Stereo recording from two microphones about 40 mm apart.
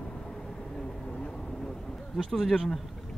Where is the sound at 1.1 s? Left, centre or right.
Left.